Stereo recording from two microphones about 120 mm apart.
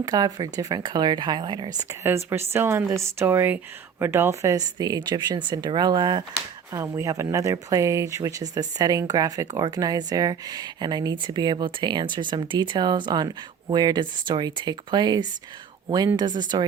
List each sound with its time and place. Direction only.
0.0 s speech: 30° right (ahead or behind)
1.9 s speech: 20° right (ahead or behind)
6.8 s speech: 25° right (ahead or behind)